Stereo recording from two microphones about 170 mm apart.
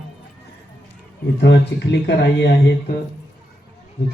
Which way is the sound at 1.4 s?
85° left.